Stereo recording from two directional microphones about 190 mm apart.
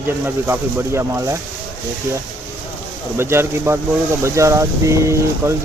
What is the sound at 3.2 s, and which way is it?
Speech, 15° right (ahead or behind).